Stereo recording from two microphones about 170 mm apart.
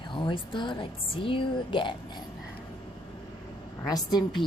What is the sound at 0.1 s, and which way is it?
Speech, 30° left (ahead or behind).